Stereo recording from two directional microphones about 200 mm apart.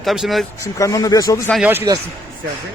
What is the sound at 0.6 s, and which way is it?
Speech, 15° left (ahead or behind).